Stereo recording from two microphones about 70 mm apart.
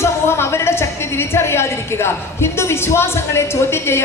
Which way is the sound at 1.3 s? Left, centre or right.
Left.